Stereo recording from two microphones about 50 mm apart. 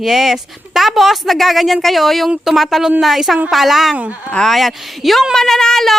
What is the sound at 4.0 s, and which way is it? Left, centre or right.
Speech, right.